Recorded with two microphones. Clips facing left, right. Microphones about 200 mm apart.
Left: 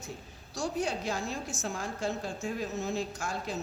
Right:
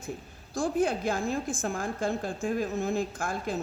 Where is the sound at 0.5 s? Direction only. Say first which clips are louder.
Right 5 dB; 55° right (ahead or behind).